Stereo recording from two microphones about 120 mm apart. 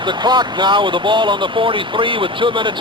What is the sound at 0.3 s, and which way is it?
Speech, 40° right (ahead or behind).